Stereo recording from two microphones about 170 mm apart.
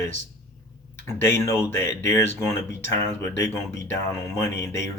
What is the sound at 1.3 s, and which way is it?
Speech, 15° left (ahead or behind).